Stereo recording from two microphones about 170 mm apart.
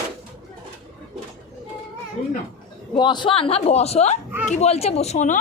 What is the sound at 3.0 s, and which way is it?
Speech, 25° left (ahead or behind).